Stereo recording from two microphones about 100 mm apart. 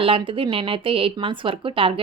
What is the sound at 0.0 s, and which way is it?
Speech, 65° right (ahead or behind).